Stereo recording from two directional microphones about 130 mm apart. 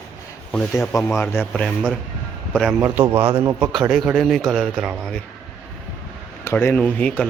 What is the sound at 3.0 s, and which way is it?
Speech, 20° right (ahead or behind).